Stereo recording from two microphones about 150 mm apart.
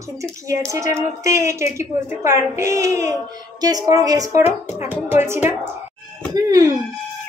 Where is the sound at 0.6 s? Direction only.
20° right (ahead or behind).